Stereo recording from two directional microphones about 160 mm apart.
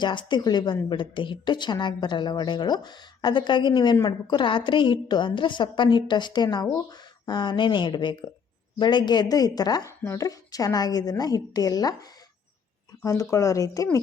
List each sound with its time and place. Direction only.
0.0 s a woman's voice: 30° left (ahead or behind)
13.1 s a woman's voice: 20° left (ahead or behind)